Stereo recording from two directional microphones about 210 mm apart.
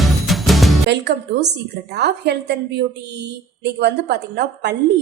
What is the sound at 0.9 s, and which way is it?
A woman's voice, 55° right (ahead or behind).